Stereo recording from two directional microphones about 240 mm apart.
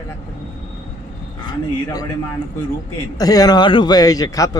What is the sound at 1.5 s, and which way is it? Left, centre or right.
Speech, centre.